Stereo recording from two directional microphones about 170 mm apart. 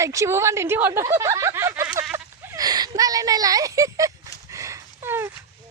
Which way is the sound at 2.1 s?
20° right (ahead or behind).